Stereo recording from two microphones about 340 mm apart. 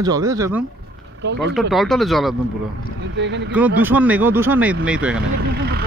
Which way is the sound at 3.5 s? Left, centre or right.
Centre.